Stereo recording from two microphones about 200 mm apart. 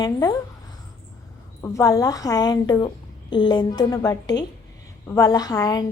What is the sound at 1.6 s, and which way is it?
A woman's voice, 15° left (ahead or behind).